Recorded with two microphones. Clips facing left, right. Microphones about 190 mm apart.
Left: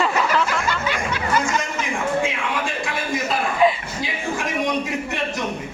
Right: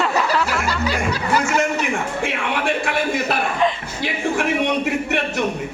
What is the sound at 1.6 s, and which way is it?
A man's voice, 70° right (ahead or behind).